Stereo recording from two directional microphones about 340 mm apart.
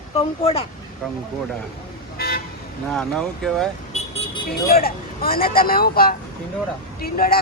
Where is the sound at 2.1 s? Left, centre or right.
Left.